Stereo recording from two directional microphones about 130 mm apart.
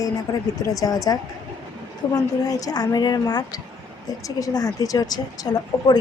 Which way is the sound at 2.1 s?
30° left (ahead or behind).